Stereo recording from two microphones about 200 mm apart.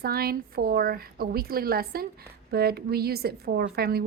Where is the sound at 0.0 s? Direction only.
50° right (ahead or behind).